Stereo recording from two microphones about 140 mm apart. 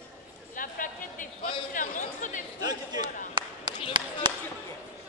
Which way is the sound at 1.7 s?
70° left (ahead or behind).